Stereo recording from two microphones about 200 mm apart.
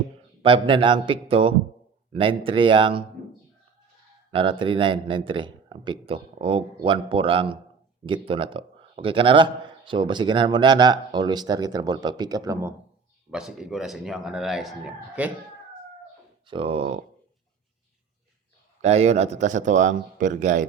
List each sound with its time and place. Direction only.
0.4 s a man's voice: 25° right (ahead or behind)
4.3 s a man's voice: 25° right (ahead or behind)
13.3 s speech: 5° right (ahead or behind)
16.5 s a man's voice: 25° right (ahead or behind)
18.8 s speech: 35° right (ahead or behind)